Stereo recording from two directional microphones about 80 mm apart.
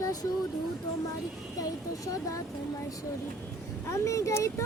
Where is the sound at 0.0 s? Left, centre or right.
Left.